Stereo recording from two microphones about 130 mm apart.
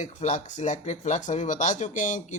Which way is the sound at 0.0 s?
60° left (ahead or behind).